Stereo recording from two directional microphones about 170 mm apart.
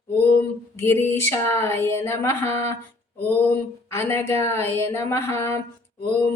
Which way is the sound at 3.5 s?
15° left (ahead or behind).